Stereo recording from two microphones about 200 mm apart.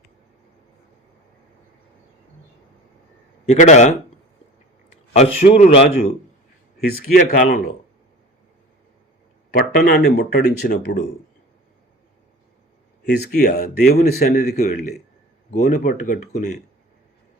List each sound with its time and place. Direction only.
3.4 s a man's voice: 35° left (ahead or behind)
5.1 s a man's voice: 30° left (ahead or behind)
6.7 s speech: 50° left (ahead or behind)
9.5 s speech: 50° left (ahead or behind)
13.1 s a man's voice: 55° left (ahead or behind)